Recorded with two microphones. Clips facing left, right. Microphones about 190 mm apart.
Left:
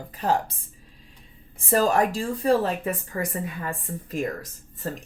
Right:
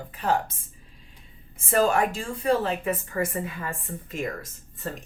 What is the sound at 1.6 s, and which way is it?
Speech, 35° left (ahead or behind).